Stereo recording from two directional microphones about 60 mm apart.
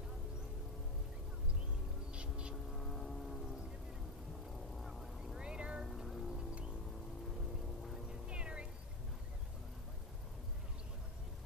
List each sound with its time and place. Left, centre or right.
2.1 s a sound: centre
2.7 s vehicle: centre
4.7 s vehicle: centre
5.4 s cat: centre
5.9 s music: centre
6.3 s music: centre
8.1 s a sound: centre